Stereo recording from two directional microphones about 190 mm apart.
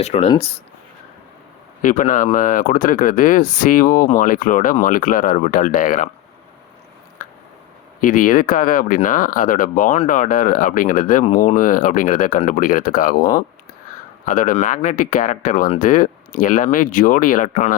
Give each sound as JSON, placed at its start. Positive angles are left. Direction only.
{"t": 0.0, "sound": "speech", "side_deg": 35}
{"t": 1.8, "sound": "speech", "side_deg": 45}
{"t": 8.0, "sound": "speech", "side_deg": 45}